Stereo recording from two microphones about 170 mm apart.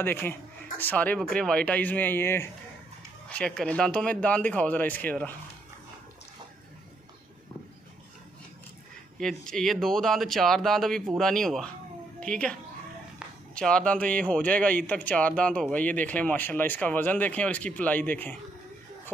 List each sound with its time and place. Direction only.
0.0 s speech: 10° left (ahead or behind)
9.2 s a woman's voice: 5° left (ahead or behind)
13.6 s speech: 5° left (ahead or behind)